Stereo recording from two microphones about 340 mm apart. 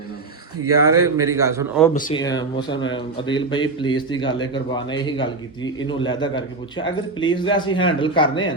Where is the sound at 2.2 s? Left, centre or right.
Centre.